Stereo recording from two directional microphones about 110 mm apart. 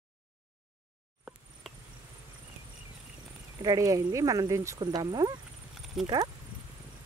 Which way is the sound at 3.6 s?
35° right (ahead or behind).